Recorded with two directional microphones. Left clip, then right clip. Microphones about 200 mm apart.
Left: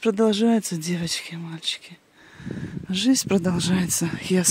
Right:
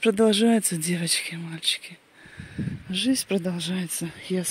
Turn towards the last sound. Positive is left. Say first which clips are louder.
# left 6 dB
turn(degrees=30)  # may be behind; listen again after turning